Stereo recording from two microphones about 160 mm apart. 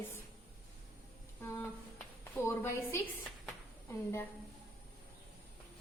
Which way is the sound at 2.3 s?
15° left (ahead or behind).